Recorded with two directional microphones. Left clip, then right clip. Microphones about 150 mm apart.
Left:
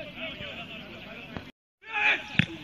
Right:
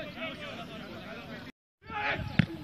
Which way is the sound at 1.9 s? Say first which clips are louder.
Left 7 dB; 15° right (ahead or behind).